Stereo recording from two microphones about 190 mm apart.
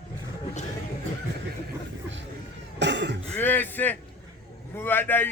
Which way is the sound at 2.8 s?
65° right (ahead or behind).